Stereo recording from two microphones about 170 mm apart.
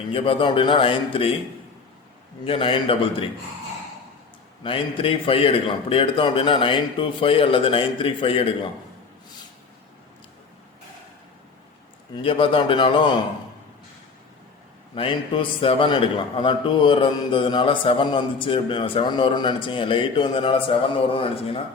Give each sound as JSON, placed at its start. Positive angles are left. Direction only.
{"t": 0.1, "sound": "a man's voice", "side_deg": 30}
{"t": 2.4, "sound": "a man's voice", "side_deg": 30}
{"t": 4.6, "sound": "a man's voice", "side_deg": 30}
{"t": 12.1, "sound": "a man's voice", "side_deg": 30}
{"t": 14.9, "sound": "a man's voice", "side_deg": 30}